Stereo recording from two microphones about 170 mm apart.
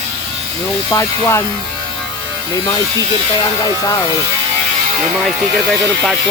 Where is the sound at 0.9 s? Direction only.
15° left (ahead or behind).